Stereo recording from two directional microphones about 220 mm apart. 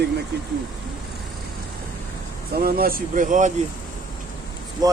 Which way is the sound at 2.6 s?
40° right (ahead or behind).